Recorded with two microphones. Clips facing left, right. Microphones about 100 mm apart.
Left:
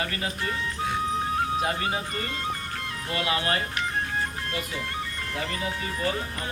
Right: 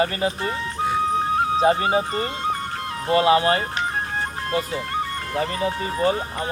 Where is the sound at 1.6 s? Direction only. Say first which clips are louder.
Right 9 dB; 30° right (ahead or behind).